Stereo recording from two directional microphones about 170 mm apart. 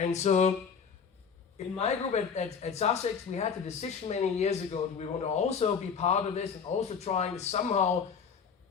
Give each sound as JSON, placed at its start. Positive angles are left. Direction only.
{"t": 0.0, "sound": "speech", "side_deg": 40}
{"t": 1.5, "sound": "speech", "side_deg": 40}